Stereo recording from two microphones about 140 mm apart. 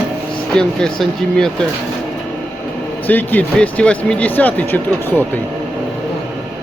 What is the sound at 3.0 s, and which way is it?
Speech, 10° left (ahead or behind).